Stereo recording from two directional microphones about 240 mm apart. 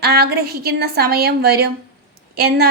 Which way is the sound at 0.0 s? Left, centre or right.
Right.